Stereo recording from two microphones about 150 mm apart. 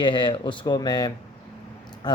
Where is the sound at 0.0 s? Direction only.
35° left (ahead or behind).